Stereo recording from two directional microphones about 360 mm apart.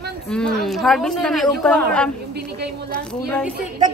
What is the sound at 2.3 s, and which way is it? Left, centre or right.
Speech, right.